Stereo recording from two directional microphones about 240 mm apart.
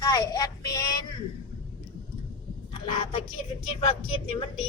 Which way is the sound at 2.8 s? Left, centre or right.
Left.